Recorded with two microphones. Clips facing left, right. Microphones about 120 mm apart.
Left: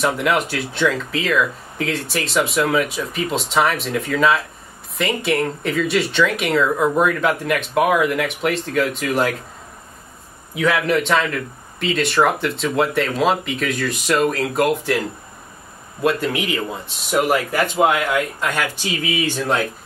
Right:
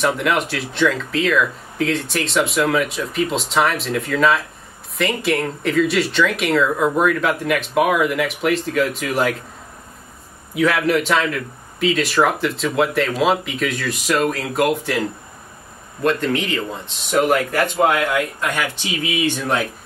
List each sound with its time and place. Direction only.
0.0 s a man's voice: centre (ahead or behind)
10.5 s a man's voice: centre (ahead or behind)
18.4 s speech: 15° right (ahead or behind)